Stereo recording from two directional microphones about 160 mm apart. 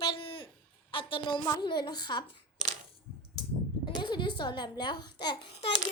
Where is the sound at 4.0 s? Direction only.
30° left (ahead or behind).